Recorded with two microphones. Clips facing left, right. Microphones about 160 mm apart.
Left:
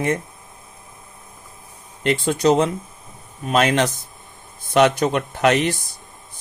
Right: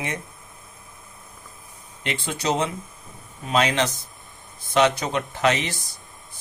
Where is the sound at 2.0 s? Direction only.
50° left (ahead or behind).